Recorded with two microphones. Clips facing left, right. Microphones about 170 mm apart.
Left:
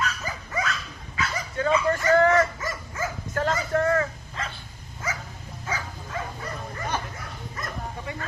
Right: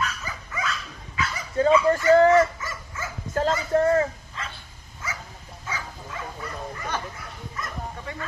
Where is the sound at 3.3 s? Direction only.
25° right (ahead or behind).